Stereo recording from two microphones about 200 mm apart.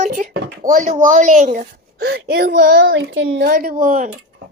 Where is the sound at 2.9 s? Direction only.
70° right (ahead or behind).